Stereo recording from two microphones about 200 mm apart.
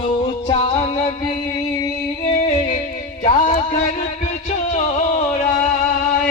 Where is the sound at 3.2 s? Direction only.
35° left (ahead or behind).